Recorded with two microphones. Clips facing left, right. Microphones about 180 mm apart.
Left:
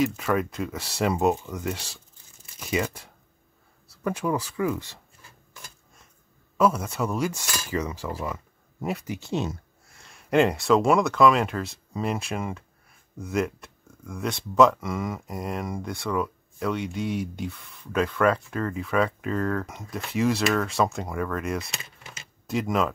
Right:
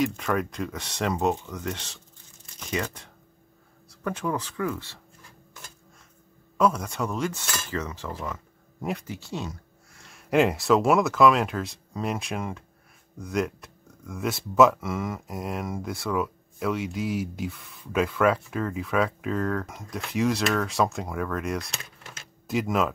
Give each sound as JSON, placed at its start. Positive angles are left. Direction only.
{"t": 0.0, "sound": "speech", "side_deg": 0}
{"t": 6.6, "sound": "speech", "side_deg": 5}
{"t": 10.3, "sound": "speech", "side_deg": 0}